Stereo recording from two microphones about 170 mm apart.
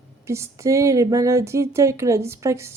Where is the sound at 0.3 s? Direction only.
15° right (ahead or behind).